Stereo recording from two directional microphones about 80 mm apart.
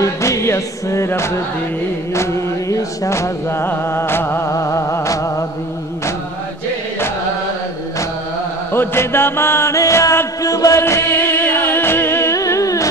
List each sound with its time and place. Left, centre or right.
0.0 s music: left
2.7 s music: left
4.5 s a sound: left
8.7 s music: left
10.8 s music: left